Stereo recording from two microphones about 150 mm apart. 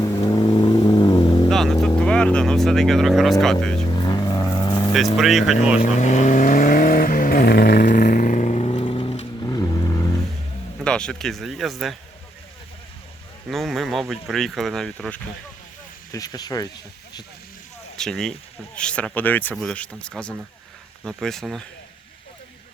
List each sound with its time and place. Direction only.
0.0 s vehicle: 25° left (ahead or behind)
1.5 s vehicle: centre (ahead or behind)
2.0 s speech: 5° left (ahead or behind)
3.8 s vehicle: 30° left (ahead or behind)
5.1 s speech: centre (ahead or behind)
5.8 s vehicle: 55° left (ahead or behind); by 9.2 s 40° left (ahead or behind)
9.4 s vehicle: 25° left (ahead or behind)
10.8 s speech: 5° left (ahead or behind)
13.5 s speech: centre (ahead or behind)
16.1 s speech: 25° left (ahead or behind)
17.9 s speech: 5° left (ahead or behind)